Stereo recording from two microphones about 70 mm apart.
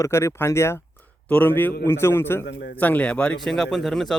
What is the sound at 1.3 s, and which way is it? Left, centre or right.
Speech, left.